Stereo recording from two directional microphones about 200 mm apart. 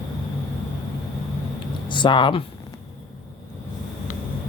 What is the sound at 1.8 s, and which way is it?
Speech, 25° left (ahead or behind).